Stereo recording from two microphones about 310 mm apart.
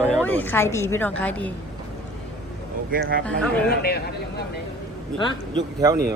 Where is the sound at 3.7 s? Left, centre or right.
Left.